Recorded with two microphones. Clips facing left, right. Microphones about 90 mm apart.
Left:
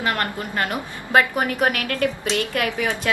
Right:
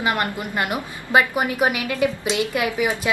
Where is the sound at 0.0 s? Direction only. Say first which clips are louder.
Right 1 dB; 15° right (ahead or behind).